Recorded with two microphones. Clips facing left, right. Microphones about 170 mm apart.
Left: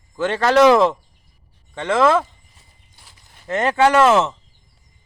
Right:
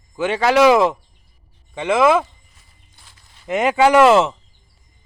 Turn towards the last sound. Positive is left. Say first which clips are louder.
# right 2 dB
turn(degrees=-15)  # may be behind; listen again after turning